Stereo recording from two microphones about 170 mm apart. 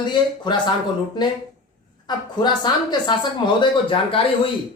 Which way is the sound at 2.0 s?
25° left (ahead or behind).